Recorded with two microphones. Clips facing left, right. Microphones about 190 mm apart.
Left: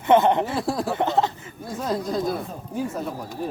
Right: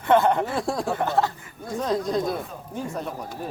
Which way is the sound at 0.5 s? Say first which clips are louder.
Left 1 dB; 5° left (ahead or behind).